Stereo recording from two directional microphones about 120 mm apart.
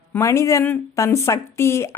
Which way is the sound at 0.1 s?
25° left (ahead or behind).